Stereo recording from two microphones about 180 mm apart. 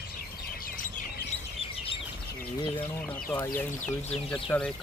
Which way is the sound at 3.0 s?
10° left (ahead or behind).